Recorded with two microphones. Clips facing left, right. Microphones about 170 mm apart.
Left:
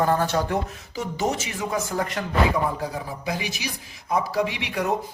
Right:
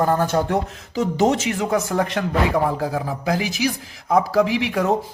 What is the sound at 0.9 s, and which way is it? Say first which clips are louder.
Speech: right 8 dB; 90° right.